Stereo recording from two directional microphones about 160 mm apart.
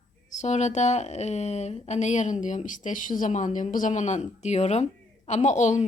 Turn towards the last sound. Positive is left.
turn(degrees=50)  # may be behind; listen again after turning